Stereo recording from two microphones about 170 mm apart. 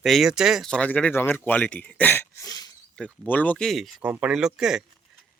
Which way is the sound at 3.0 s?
10° left (ahead or behind).